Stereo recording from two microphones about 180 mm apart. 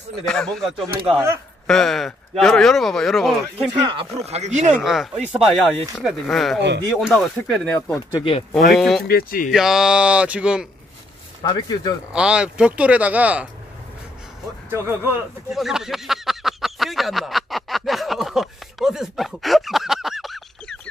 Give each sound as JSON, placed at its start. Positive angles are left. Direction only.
{"t": 0.2, "sound": "speech", "side_deg": 5}
{"t": 3.7, "sound": "speech", "side_deg": -30}
{"t": 4.3, "sound": "speech", "side_deg": -40}
{"t": 4.8, "sound": "speech", "side_deg": 0}
{"t": 8.1, "sound": "speech", "side_deg": 30}
{"t": 8.7, "sound": "speech", "side_deg": 0}
{"t": 9.0, "sound": "speech", "side_deg": 55}
{"t": 9.5, "sound": "speech", "side_deg": -5}
{"t": 11.4, "sound": "speech", "side_deg": 20}
{"t": 12.1, "sound": "speech", "side_deg": -5}
{"t": 15.5, "sound": "a sound", "side_deg": 0}